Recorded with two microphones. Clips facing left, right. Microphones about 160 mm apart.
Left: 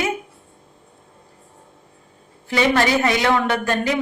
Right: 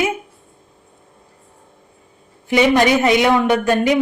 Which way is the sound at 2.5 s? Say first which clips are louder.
Right 4 dB; 20° right (ahead or behind).